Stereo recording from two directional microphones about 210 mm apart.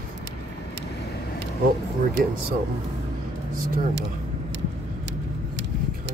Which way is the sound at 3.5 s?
45° right (ahead or behind).